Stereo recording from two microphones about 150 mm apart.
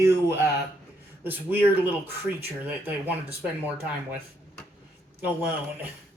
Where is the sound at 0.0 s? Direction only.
15° right (ahead or behind).